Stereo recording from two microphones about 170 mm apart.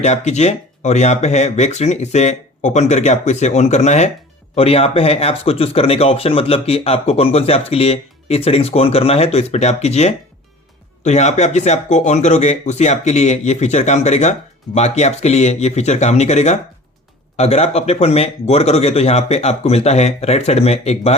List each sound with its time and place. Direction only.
0.0 s speech: 40° left (ahead or behind)